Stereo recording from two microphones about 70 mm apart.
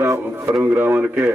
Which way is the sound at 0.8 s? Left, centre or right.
Right.